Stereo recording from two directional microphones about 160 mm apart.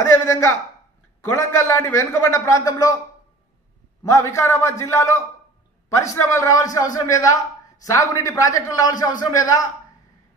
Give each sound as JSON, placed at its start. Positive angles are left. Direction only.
{"t": 0.2, "sound": "a man's voice", "side_deg": 20}
{"t": 4.1, "sound": "a man's voice", "side_deg": 20}